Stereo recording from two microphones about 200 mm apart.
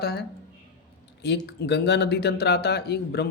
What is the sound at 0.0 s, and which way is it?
Speech, 50° left (ahead or behind).